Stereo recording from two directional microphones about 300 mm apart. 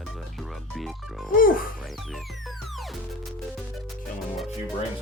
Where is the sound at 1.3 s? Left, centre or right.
Left.